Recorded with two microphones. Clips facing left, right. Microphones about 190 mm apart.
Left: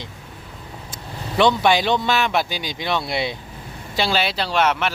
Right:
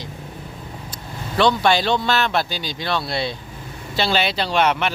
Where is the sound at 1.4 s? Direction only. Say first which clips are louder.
Even; 15° left (ahead or behind).